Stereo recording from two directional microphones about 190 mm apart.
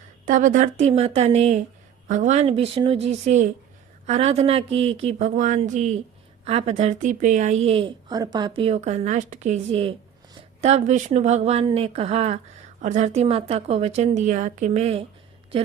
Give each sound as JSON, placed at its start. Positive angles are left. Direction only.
{"t": 0.3, "sound": "a woman's voice", "side_deg": -40}